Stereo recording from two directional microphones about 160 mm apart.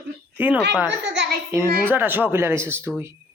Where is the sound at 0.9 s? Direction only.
90° right.